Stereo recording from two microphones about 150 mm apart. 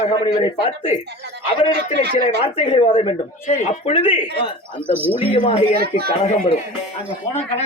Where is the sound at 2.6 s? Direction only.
40° left (ahead or behind).